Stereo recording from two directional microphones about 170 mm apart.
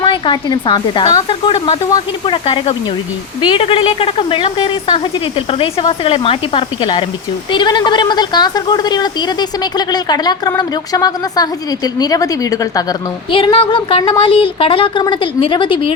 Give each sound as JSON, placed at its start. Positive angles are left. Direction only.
{"t": 0.0, "sound": "speech", "side_deg": 25}
{"t": 13.3, "sound": "speech", "side_deg": 30}